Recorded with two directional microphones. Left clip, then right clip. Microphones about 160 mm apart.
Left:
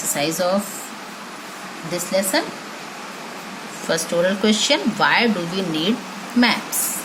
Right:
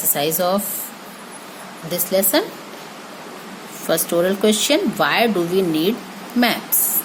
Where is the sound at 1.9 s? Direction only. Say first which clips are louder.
Right 2 dB; 75° right (ahead or behind).